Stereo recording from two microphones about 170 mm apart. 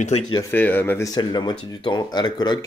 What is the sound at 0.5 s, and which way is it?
Speech, 10° left (ahead or behind).